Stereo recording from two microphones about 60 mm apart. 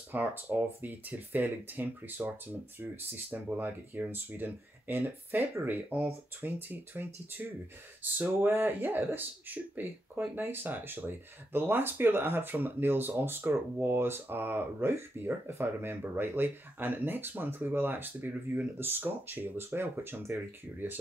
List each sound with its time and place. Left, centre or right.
0.1 s speech: right
4.9 s speech: right
5.7 s speech: right